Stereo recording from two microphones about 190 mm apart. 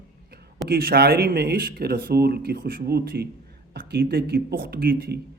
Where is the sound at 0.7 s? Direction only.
55° right (ahead or behind).